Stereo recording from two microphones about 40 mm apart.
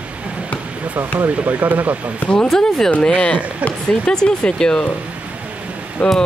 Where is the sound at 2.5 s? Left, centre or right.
Centre.